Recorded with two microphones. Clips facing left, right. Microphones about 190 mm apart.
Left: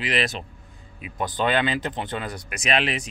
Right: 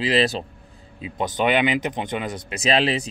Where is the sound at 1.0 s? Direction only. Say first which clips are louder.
Right 3 dB; 20° right (ahead or behind).